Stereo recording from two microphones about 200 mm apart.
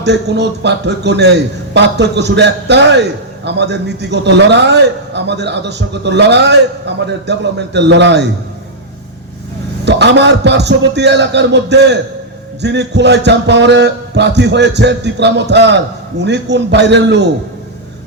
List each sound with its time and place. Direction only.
0.0 s a man's voice: 60° right (ahead or behind)
9.8 s a man's voice: 60° right (ahead or behind)